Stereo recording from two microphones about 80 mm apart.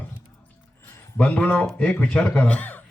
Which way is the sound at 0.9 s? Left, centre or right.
Left.